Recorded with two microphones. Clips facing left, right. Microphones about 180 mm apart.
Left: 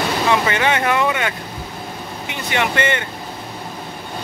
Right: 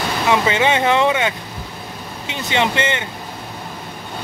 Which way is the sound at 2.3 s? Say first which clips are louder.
Right 2 dB; 20° right (ahead or behind).